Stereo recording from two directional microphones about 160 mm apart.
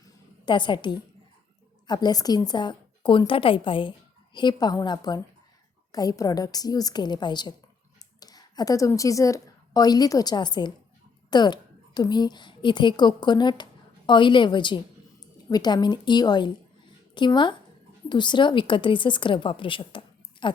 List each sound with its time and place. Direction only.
0.4 s a woman's voice: 30° left (ahead or behind)